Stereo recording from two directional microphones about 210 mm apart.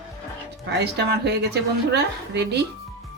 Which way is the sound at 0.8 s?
50° right (ahead or behind).